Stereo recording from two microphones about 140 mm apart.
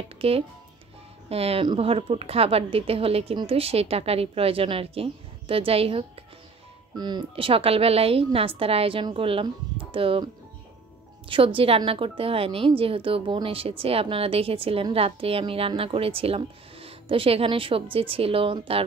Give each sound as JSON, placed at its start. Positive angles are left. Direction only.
{"t": 0.2, "sound": "a woman's voice", "side_deg": -40}
{"t": 7.0, "sound": "a woman's voice", "side_deg": -30}
{"t": 11.2, "sound": "a woman's voice", "side_deg": -40}